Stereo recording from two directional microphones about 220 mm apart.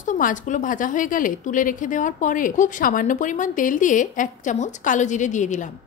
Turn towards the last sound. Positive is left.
turn(degrees=35)  # may be behind; listen again after turning